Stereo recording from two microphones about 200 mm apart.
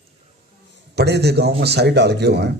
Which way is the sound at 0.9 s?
55° right (ahead or behind).